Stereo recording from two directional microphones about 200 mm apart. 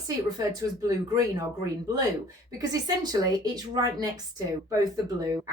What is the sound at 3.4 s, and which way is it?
A woman's voice, 20° right (ahead or behind).